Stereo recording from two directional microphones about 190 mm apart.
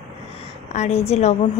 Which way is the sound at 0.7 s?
35° left (ahead or behind).